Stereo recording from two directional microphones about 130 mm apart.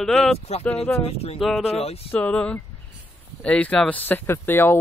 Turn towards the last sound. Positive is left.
turn(degrees=15)  # may be behind; listen again after turning